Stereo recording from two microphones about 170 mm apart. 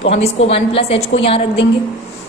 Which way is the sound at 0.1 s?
35° left (ahead or behind).